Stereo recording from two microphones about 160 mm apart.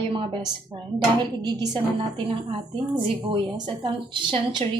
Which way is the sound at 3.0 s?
30° right (ahead or behind).